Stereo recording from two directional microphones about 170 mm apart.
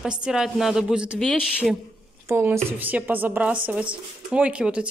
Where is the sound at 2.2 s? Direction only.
15° right (ahead or behind).